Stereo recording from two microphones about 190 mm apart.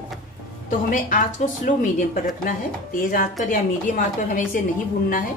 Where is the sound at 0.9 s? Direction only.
45° left (ahead or behind).